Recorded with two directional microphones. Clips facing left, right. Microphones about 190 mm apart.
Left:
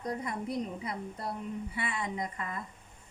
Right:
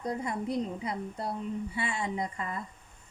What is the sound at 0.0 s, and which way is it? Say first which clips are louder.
A woman's voice: right 2 dB; 30° right (ahead or behind).